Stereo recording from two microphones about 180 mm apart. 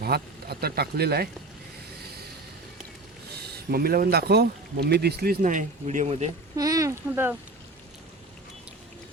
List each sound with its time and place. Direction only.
0.0 s speech: 60° right (ahead or behind)
3.7 s speech: 55° right (ahead or behind); by 6.3 s 35° right (ahead or behind)
6.6 s speech: 20° right (ahead or behind)